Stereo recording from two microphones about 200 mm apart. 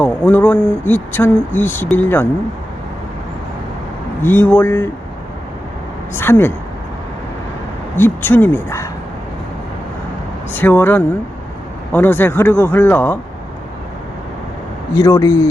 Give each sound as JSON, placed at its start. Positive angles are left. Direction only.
{"t": 0.0, "sound": "speech", "side_deg": 10}
{"t": 4.2, "sound": "speech", "side_deg": 10}
{"t": 6.1, "sound": "speech", "side_deg": 10}
{"t": 7.9, "sound": "speech", "side_deg": 10}
{"t": 10.6, "sound": "speech", "side_deg": 10}
{"t": 14.9, "sound": "speech", "side_deg": 15}